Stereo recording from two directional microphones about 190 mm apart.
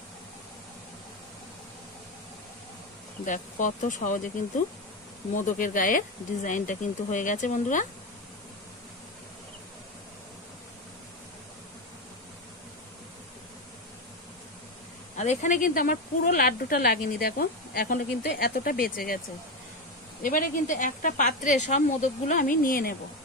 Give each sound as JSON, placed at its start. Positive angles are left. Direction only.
{"t": 3.3, "sound": "a woman's voice", "side_deg": 40}
{"t": 15.1, "sound": "a woman's voice", "side_deg": 40}
{"t": 20.2, "sound": "a woman's voice", "side_deg": 45}